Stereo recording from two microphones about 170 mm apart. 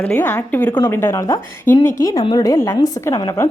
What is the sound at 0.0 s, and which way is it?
A woman's voice, 10° left (ahead or behind).